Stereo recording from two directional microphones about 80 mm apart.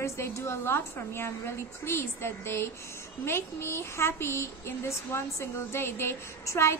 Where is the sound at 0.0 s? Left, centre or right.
Left.